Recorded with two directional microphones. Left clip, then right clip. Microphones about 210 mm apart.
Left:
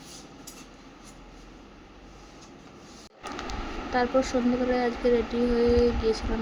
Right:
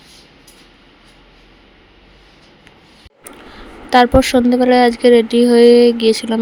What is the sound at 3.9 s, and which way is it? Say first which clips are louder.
Speech: right 15 dB; 50° right (ahead or behind).